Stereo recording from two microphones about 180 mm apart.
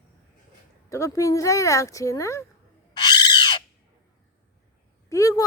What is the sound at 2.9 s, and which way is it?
Squawk, 25° left (ahead or behind).